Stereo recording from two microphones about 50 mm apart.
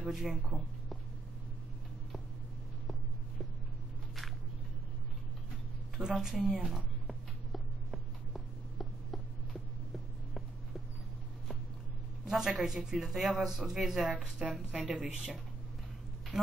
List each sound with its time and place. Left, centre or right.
0.1 s speech: centre
6.1 s speech: centre
7.1 s a sound: centre
12.3 s speech: centre
14.1 s a woman's voice: centre
14.5 s a woman's voice: centre
14.9 s speech: centre